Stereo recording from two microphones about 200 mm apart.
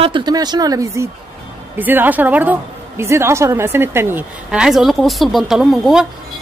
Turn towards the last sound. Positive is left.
turn(degrees=0)  # may be behind; listen again after turning